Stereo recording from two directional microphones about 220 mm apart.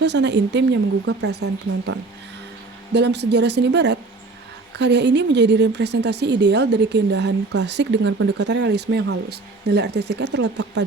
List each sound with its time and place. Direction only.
0.0 s a woman's voice: 50° right (ahead or behind)
2.9 s a woman's voice: 50° right (ahead or behind)